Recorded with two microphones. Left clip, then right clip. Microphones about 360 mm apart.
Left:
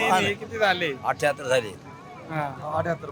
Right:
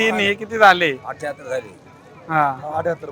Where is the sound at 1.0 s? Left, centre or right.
Left.